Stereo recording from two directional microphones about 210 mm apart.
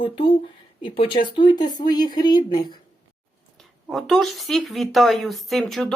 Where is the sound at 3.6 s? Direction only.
Centre (ahead or behind).